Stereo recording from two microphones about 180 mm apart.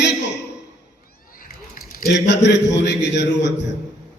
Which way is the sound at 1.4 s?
50° left (ahead or behind).